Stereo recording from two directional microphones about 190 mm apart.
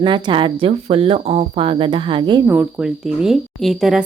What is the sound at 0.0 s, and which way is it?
Speech, 25° right (ahead or behind).